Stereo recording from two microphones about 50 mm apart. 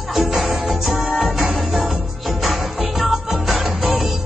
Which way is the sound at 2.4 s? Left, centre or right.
Centre.